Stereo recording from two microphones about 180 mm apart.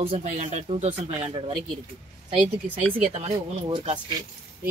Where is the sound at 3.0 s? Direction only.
35° right (ahead or behind).